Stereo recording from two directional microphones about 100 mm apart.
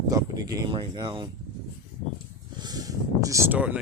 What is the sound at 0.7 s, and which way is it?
Speech, 55° right (ahead or behind).